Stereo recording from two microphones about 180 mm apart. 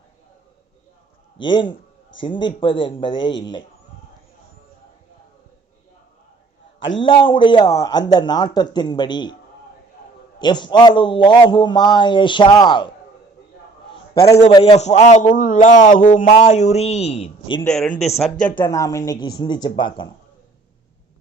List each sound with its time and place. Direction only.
1.4 s a man's voice: 25° left (ahead or behind)
6.9 s a man's voice: 30° left (ahead or behind)
10.4 s a man's voice: 25° left (ahead or behind)
14.5 s speech: 35° left (ahead or behind)
17.7 s a man's voice: 5° left (ahead or behind); by 20.1 s 25° left (ahead or behind)